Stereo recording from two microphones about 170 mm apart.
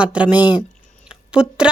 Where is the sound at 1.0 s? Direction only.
5° right (ahead or behind).